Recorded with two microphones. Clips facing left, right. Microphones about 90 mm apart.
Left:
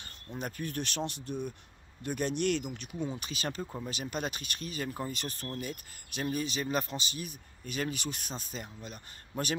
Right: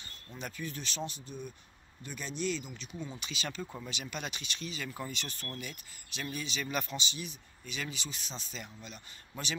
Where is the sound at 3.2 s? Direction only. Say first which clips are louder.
Left 3 dB; 45° left (ahead or behind).